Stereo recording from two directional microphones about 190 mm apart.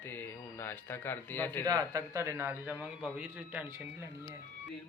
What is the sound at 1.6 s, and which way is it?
A man's voice, 20° right (ahead or behind).